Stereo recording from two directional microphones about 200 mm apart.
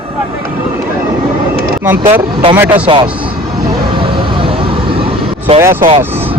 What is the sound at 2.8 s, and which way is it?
Speech, 25° right (ahead or behind).